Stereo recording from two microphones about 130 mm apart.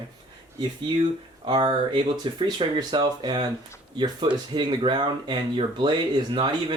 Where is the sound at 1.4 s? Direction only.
40° right (ahead or behind).